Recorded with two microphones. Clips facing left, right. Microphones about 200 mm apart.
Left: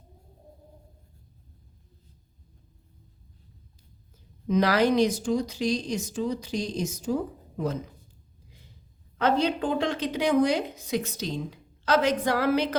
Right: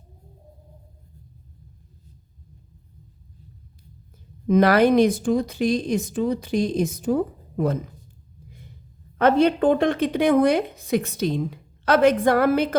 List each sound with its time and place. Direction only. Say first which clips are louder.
4.4 s a woman's voice: right 6 dB; 55° right (ahead or behind)
9.1 s a woman's voice: right 7 dB; 60° right (ahead or behind)